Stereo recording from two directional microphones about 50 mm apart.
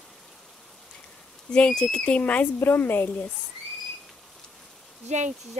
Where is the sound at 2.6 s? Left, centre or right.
Left.